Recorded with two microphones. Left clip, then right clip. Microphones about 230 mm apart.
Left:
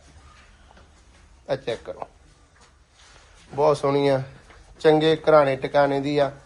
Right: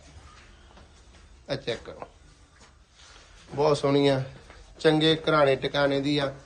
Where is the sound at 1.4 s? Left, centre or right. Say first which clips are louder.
Left 5 dB; centre.